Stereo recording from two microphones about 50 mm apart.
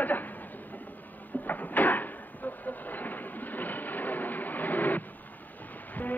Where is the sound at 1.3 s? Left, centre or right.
Left.